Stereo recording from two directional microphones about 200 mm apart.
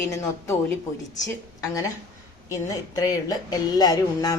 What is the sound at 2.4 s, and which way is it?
Speech, 15° left (ahead or behind).